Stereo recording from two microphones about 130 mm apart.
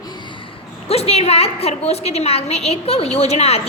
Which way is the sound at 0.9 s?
50° left (ahead or behind).